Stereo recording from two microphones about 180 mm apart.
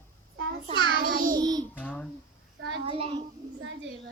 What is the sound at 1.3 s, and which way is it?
Music, 25° right (ahead or behind).